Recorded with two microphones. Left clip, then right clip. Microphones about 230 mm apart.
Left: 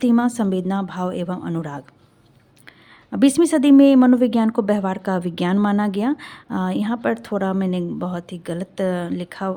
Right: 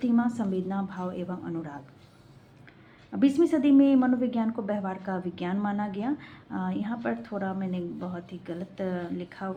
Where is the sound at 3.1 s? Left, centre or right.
Left.